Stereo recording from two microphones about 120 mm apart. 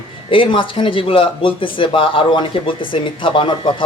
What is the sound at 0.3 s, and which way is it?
Speech, 45° left (ahead or behind).